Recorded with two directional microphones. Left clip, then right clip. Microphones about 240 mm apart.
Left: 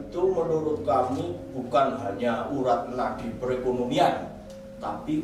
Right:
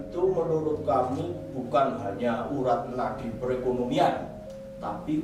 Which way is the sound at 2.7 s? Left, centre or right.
Centre.